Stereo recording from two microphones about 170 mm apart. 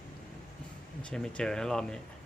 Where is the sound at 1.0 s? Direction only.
5° left (ahead or behind).